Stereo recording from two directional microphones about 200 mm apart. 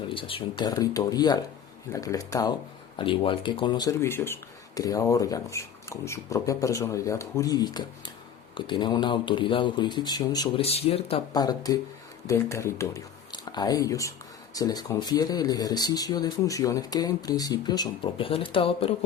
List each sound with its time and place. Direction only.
0.1 s speech: 25° left (ahead or behind)
10.7 s speech: 30° left (ahead or behind)
11.3 s speech: 20° left (ahead or behind)